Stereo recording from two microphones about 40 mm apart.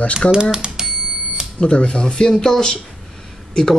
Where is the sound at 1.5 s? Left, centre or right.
Left.